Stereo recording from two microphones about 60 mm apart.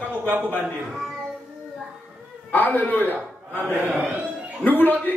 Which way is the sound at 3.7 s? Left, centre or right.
Right.